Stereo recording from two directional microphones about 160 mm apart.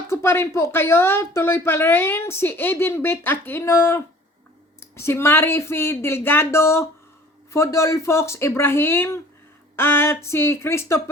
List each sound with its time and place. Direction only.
0.1 s speech: 15° left (ahead or behind)